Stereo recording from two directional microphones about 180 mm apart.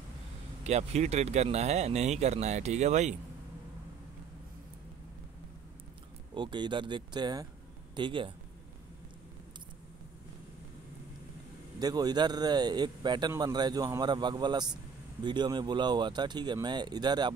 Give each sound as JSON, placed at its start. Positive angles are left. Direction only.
{"t": 0.7, "sound": "speech", "side_deg": -35}
{"t": 6.3, "sound": "speech", "side_deg": -25}
{"t": 11.8, "sound": "speech", "side_deg": -20}